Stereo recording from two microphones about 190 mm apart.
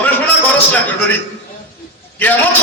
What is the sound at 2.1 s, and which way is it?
Speech, 10° left (ahead or behind).